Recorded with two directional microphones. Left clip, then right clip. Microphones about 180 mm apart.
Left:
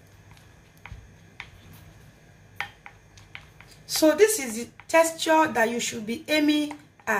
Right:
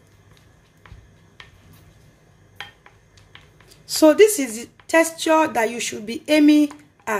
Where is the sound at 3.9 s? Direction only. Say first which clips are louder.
Right 6 dB; 45° right (ahead or behind).